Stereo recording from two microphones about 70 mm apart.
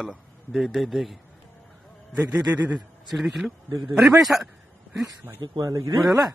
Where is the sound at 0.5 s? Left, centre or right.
Centre.